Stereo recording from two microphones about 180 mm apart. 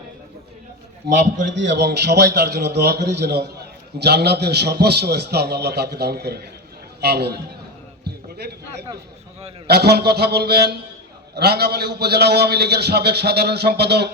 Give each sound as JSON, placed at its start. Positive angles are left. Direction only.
{"t": 1.1, "sound": "a man's voice", "side_deg": -45}
{"t": 1.5, "sound": "a man's voice", "side_deg": -80}
{"t": 8.0, "sound": "a sound", "side_deg": -65}
{"t": 9.6, "sound": "a man's voice", "side_deg": -65}